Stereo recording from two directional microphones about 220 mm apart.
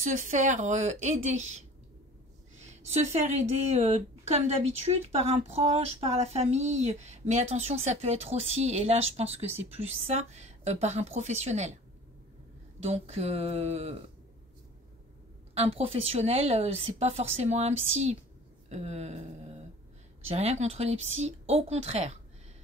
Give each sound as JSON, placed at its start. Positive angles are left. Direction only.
{"t": 0.0, "sound": "a woman's voice", "side_deg": -35}
{"t": 2.6, "sound": "a woman's voice", "side_deg": -30}
{"t": 12.8, "sound": "a woman's voice", "side_deg": -30}
{"t": 15.5, "sound": "a woman's voice", "side_deg": -25}
{"t": 20.2, "sound": "a woman's voice", "side_deg": -30}